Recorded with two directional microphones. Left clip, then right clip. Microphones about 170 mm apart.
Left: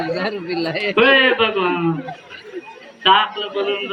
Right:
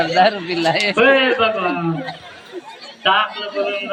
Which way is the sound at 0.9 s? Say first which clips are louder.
Left 2 dB; 65° right (ahead or behind).